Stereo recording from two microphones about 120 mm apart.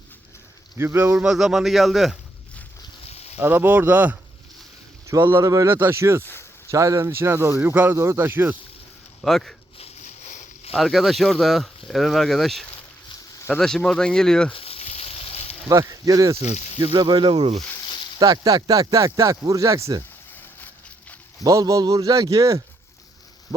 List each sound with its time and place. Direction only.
0.8 s speech: 20° right (ahead or behind)
1.1 s speech: 5° right (ahead or behind)
3.1 s a sound: 60° left (ahead or behind)
3.3 s speech: 15° right (ahead or behind)
9.2 s speech: centre (ahead or behind)
9.7 s a sound: 60° left (ahead or behind)
10.8 s speech: centre (ahead or behind)
14.5 s frying: 50° left (ahead or behind)
15.7 s speech: 25° right (ahead or behind)
16.9 s speech: 40° right (ahead or behind)
18.2 s speech: 30° right (ahead or behind)
21.4 s speech: 30° right (ahead or behind)
23.5 s a sound: centre (ahead or behind)